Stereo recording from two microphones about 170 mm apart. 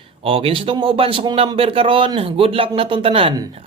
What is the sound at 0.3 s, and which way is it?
Speech, 35° right (ahead or behind).